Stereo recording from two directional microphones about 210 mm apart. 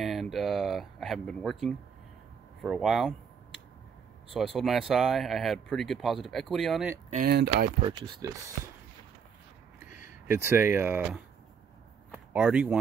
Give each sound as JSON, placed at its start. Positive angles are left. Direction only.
{"t": 0.0, "sound": "speech", "side_deg": 0}
{"t": 4.3, "sound": "speech", "side_deg": 0}
{"t": 7.1, "sound": "speech", "side_deg": -45}
{"t": 7.8, "sound": "speech", "side_deg": -20}
{"t": 9.9, "sound": "speech", "side_deg": -10}
{"t": 12.1, "sound": "a sound", "side_deg": -5}